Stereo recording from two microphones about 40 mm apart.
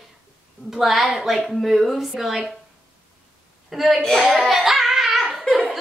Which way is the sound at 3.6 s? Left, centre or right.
Centre.